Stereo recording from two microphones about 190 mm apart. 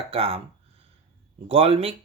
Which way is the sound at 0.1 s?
30° right (ahead or behind).